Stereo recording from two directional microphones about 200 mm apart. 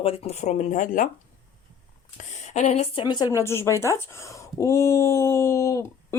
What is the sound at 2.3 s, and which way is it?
Speech, 35° left (ahead or behind).